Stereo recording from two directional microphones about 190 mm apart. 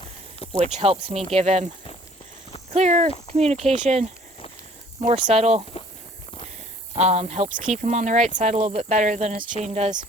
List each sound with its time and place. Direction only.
0.5 s speech: 35° right (ahead or behind)
2.7 s speech: 35° right (ahead or behind)
5.0 s speech: 30° right (ahead or behind)
6.9 s speech: 35° right (ahead or behind)